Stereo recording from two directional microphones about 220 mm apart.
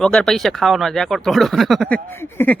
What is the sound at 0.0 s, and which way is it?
Speech, 5° left (ahead or behind).